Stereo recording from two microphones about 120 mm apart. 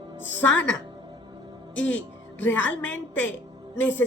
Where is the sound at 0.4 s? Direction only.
10° left (ahead or behind).